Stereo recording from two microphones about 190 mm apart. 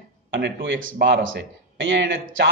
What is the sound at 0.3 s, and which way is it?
Speech, 75° right (ahead or behind).